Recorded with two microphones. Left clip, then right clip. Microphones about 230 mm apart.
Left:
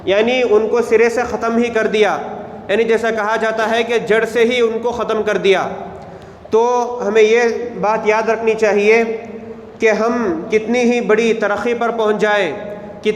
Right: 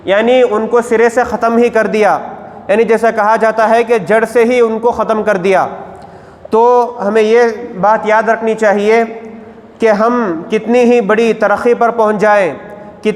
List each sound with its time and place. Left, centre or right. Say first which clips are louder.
0.0 s a man's voice: right 5 dB; right
0.7 s a man's voice: right 3 dB; right